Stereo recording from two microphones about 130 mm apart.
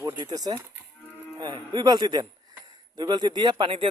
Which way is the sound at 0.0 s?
30° right (ahead or behind).